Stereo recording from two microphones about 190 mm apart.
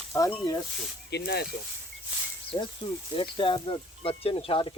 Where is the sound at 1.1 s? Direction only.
60° left (ahead or behind).